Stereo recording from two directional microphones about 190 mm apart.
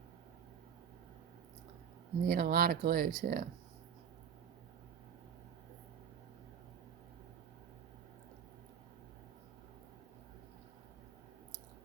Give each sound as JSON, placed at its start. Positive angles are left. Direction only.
{"t": 2.2, "sound": "speech", "side_deg": -50}